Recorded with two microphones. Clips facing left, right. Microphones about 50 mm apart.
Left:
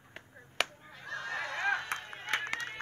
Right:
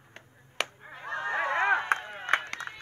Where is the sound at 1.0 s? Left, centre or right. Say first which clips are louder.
Right 7 dB; right.